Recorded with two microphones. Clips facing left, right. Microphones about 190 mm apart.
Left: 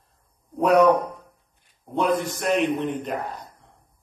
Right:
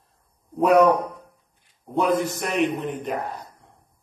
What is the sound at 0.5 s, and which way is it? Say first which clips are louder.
Speech: right 1 dB; centre (ahead or behind).